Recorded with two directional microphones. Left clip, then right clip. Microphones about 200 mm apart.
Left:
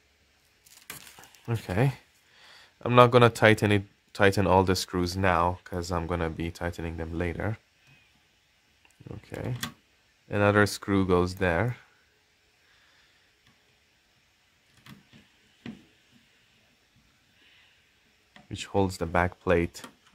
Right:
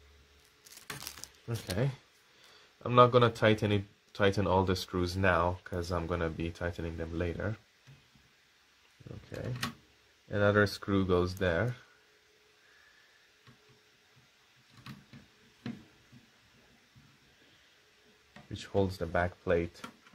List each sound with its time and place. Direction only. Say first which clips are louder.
1.4 s speech: left 7 dB; 40° left (ahead or behind)
10.2 s speech: left 4 dB; 35° left (ahead or behind)
18.5 s speech: left 4 dB; 35° left (ahead or behind)